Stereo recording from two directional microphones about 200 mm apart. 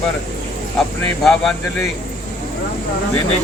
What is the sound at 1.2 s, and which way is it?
Speech, centre (ahead or behind).